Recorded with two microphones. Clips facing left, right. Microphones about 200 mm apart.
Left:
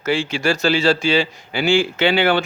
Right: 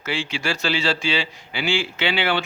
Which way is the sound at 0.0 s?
45° left (ahead or behind).